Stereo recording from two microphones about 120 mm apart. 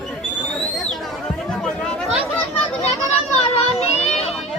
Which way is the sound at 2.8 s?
60° left (ahead or behind).